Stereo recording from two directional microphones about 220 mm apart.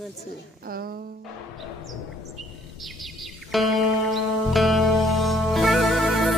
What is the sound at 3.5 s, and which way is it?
Music, centre (ahead or behind).